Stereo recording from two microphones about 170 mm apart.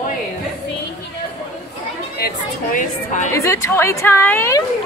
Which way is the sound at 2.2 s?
60° left (ahead or behind).